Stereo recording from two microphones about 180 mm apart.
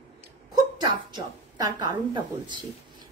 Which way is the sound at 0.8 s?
25° right (ahead or behind).